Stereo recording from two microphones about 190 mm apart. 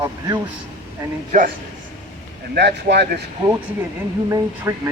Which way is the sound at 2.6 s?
60° right (ahead or behind).